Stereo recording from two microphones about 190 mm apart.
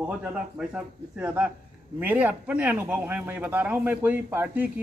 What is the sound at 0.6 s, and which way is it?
A man's voice, 5° right (ahead or behind).